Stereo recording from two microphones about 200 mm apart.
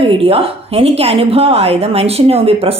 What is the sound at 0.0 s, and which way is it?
A woman's voice, 30° right (ahead or behind).